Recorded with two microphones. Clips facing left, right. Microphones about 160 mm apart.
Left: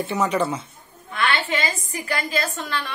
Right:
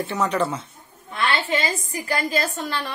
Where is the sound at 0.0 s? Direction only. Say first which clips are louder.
Left 1 dB; 5° left (ahead or behind).